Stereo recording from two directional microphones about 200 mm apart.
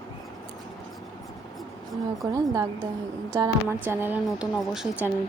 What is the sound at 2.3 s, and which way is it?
A woman's voice, 15° right (ahead or behind).